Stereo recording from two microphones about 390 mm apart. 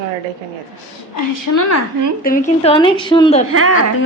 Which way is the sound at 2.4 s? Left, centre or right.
Centre.